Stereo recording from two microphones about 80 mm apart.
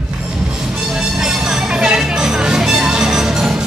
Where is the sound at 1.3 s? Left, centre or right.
Centre.